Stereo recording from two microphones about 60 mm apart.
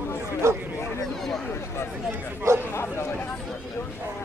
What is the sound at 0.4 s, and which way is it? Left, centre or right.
Speech, right.